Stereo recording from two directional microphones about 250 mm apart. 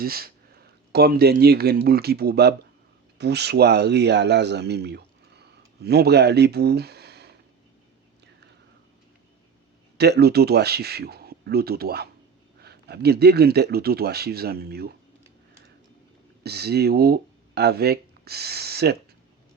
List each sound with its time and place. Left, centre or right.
0.0 s speech: right
10.0 s speech: right
16.4 s speech: right